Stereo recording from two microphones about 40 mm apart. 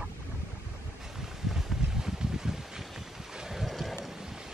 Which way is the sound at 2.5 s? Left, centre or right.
Centre.